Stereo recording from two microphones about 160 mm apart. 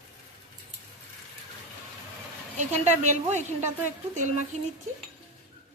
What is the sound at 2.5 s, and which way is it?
A woman's voice, 45° right (ahead or behind).